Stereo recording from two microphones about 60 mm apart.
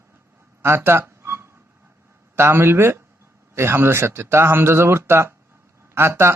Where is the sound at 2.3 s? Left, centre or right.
Right.